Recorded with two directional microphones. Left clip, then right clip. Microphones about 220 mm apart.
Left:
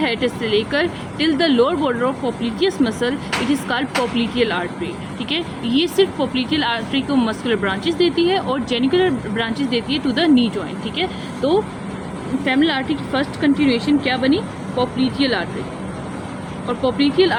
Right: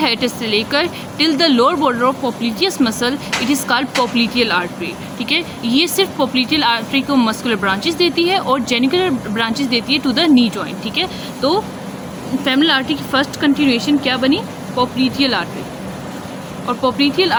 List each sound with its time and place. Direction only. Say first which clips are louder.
0.0 s speech: right 3 dB; 50° right (ahead or behind)
16.6 s speech: right 3 dB; 50° right (ahead or behind)